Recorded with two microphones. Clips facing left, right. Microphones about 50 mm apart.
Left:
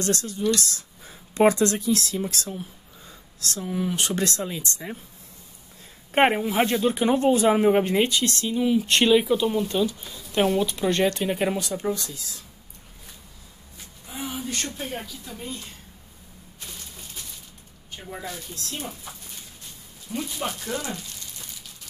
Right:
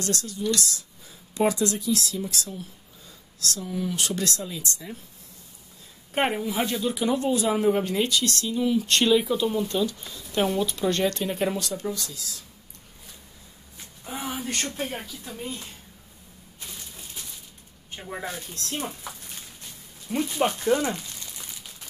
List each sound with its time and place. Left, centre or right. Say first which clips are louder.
0.0 s speech: left 4 dB; left
6.1 s speech: left 5 dB; left
14.0 s a sound: right 1 dB; right
15.0 s speech: left 1 dB; centre
17.9 s speech: right 2 dB; right
18.2 s speech: right 1 dB; right
20.3 s speech: right 10 dB; right